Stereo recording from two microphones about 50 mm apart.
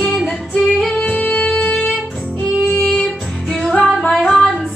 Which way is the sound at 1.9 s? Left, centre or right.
Centre.